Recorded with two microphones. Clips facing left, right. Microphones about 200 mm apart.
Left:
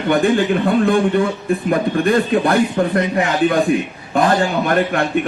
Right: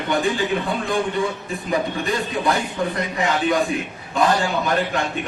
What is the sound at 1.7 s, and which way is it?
A man's voice, 55° left (ahead or behind).